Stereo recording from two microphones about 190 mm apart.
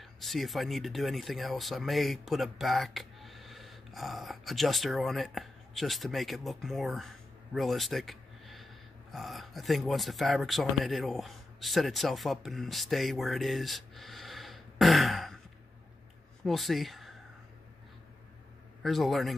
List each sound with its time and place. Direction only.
0.0 s speech: centre (ahead or behind)
16.4 s speech: centre (ahead or behind)
18.8 s speech: centre (ahead or behind)